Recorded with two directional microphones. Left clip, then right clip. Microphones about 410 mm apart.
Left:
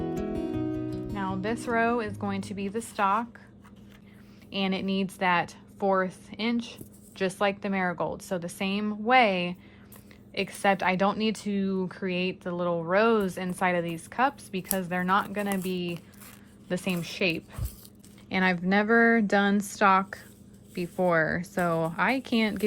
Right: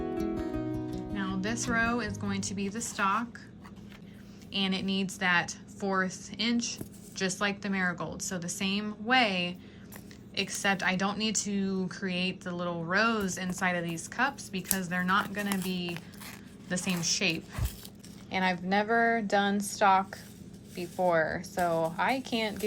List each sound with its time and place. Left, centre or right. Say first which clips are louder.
1.1 s speech: left 3 dB; centre
4.5 s a woman's voice: left 2 dB; centre